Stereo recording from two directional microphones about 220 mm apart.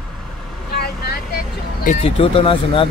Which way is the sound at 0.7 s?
45° left (ahead or behind).